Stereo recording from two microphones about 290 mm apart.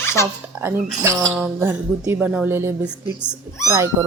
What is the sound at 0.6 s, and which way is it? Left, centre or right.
A woman's voice, centre.